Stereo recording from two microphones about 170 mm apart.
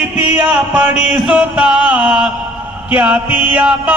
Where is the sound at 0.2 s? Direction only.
10° right (ahead or behind).